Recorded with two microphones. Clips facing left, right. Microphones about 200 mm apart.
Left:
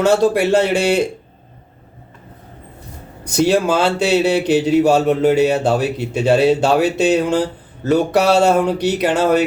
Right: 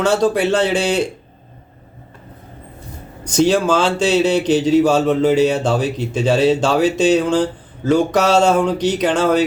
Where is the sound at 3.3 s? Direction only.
10° left (ahead or behind).